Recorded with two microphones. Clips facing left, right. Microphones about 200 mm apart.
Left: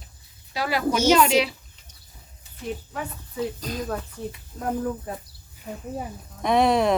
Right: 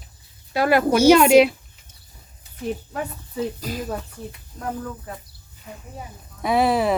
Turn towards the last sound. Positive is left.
turn(degrees=-5)  # may be behind; listen again after turning